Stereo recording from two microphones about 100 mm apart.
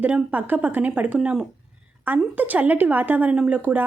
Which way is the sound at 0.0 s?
10° right (ahead or behind).